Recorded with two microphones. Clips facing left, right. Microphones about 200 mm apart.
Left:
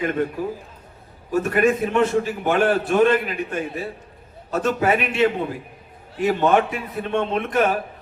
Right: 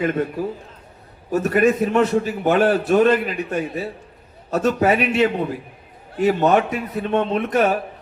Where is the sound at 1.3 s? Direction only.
40° right (ahead or behind).